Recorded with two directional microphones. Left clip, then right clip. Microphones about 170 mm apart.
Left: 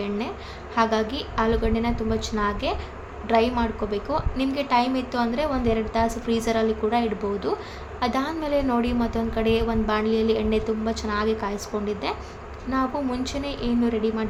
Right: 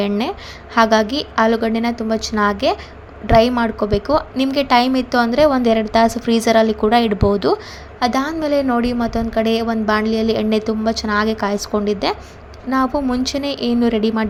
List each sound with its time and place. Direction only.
0.0 s a woman's voice: 45° right (ahead or behind)
7.9 s a woman's voice: 35° right (ahead or behind)